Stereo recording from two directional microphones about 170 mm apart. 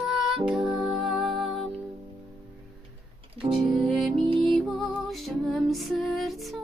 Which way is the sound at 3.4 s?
35° right (ahead or behind).